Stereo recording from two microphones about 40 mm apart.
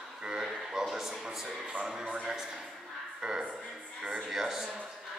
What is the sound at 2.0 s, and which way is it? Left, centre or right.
Speech, right.